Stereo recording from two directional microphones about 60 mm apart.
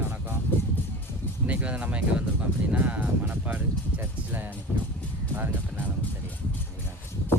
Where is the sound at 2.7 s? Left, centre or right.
Right.